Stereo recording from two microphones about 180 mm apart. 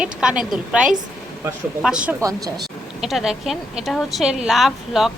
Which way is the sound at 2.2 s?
20° right (ahead or behind).